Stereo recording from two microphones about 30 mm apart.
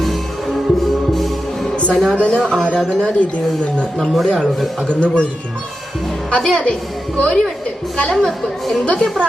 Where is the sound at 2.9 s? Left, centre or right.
Left.